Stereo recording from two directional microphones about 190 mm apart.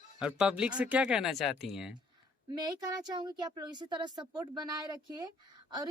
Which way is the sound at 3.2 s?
20° right (ahead or behind).